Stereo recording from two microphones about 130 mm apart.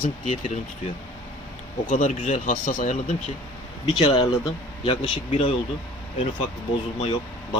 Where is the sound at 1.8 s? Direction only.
85° left.